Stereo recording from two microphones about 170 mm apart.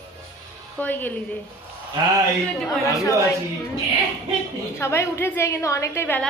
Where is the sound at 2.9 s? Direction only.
20° left (ahead or behind).